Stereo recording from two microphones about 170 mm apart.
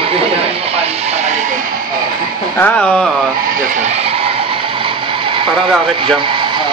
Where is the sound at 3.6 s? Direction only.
45° right (ahead or behind).